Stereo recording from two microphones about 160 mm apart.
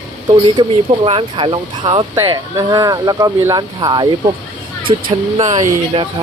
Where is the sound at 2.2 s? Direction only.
20° right (ahead or behind).